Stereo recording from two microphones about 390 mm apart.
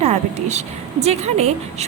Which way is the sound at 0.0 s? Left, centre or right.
Centre.